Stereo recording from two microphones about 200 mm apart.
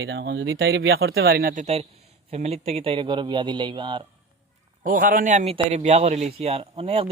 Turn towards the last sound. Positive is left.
turn(degrees=-30)  # may be behind; listen again after turning